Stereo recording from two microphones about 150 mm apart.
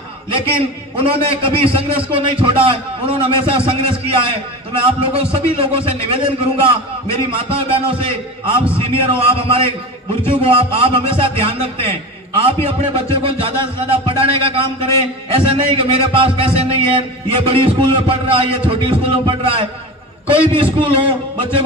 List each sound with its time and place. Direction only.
0.3 s a man's voice: 35° right (ahead or behind)
20.8 s a man's voice: 35° right (ahead or behind)